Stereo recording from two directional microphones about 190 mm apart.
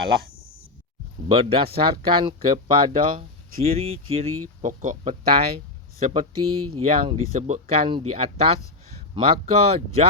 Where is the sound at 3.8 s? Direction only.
30° right (ahead or behind).